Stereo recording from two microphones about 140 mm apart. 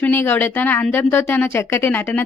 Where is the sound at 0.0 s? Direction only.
15° left (ahead or behind).